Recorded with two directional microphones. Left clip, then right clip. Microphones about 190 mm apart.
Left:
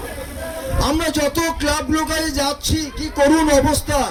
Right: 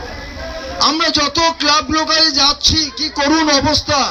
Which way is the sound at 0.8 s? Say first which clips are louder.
Right 5 dB; 55° left (ahead or behind).